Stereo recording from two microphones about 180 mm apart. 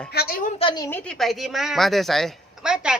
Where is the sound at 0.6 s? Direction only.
25° left (ahead or behind).